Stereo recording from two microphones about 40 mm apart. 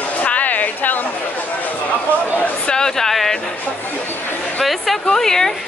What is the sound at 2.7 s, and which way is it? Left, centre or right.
Speech, centre.